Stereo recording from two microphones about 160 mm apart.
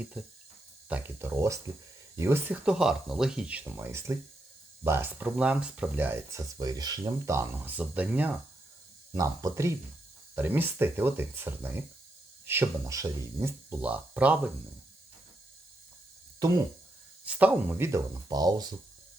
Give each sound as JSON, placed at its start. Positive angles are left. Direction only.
{"t": 0.0, "sound": "speech", "side_deg": -5}
{"t": 9.1, "sound": "speech", "side_deg": -20}
{"t": 17.2, "sound": "speech", "side_deg": -10}